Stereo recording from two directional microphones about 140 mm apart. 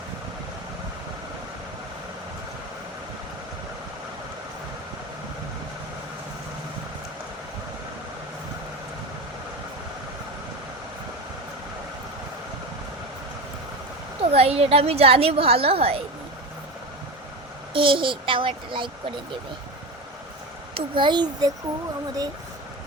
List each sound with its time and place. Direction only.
14.2 s a woman's voice: 45° right (ahead or behind)
17.7 s a child's voice: 40° right (ahead or behind)
20.7 s a child's voice: 35° right (ahead or behind)